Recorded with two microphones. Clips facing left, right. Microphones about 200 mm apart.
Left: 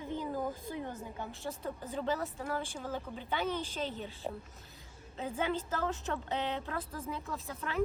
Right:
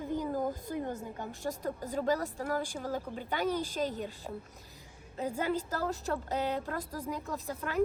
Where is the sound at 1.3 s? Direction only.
15° right (ahead or behind).